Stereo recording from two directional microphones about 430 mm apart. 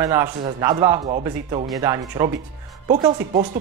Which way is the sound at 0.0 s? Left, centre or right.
Centre.